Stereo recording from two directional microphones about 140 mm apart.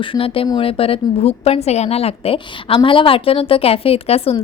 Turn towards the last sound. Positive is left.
turn(degrees=45)  # may be behind; listen again after turning